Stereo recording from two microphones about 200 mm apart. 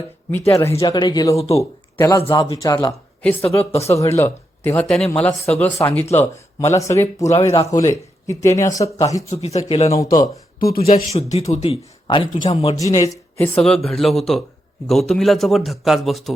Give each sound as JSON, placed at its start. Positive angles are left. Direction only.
{"t": 0.3, "sound": "speech", "side_deg": 15}
{"t": 0.7, "sound": "speech", "side_deg": 25}
{"t": 1.4, "sound": "speech", "side_deg": 30}
{"t": 2.0, "sound": "speech", "side_deg": 15}
{"t": 9.3, "sound": "speech", "side_deg": 35}
{"t": 9.9, "sound": "speech", "side_deg": 15}
{"t": 10.2, "sound": "speech", "side_deg": 50}
{"t": 10.8, "sound": "speech", "side_deg": 30}
{"t": 13.4, "sound": "a man's voice", "side_deg": 5}